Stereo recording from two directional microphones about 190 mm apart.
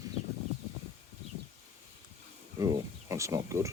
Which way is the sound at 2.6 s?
15° right (ahead or behind).